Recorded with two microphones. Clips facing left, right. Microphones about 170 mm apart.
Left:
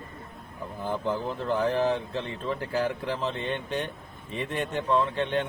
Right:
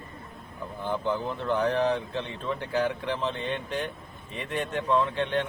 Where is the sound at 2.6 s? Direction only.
Centre (ahead or behind).